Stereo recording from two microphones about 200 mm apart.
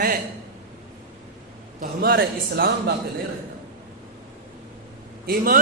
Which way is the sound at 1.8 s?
50° right (ahead or behind).